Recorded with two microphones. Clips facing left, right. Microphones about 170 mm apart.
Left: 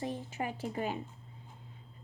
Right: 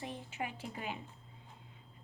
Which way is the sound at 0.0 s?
40° left (ahead or behind).